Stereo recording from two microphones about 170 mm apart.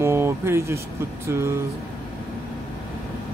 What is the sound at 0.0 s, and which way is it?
Speech, 15° right (ahead or behind).